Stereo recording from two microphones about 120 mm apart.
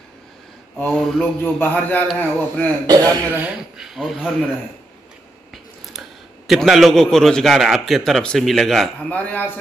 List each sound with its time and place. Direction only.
0.9 s a sound: 5° left (ahead or behind)
2.9 s speech: 35° right (ahead or behind)
3.3 s speech: 15° right (ahead or behind)
3.7 s speech: 5° right (ahead or behind)
5.5 s speech: centre (ahead or behind)
9.1 s a sound: 15° left (ahead or behind)